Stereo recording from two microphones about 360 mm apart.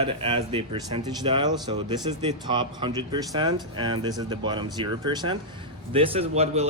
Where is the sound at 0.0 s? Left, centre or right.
Centre.